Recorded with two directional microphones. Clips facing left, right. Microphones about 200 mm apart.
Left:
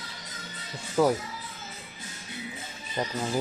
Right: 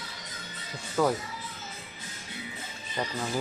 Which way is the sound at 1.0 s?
10° left (ahead or behind).